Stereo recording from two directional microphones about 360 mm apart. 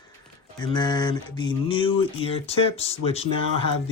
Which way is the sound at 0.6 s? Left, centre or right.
Centre.